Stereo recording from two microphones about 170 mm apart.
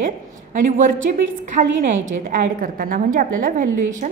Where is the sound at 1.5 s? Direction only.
50° right (ahead or behind).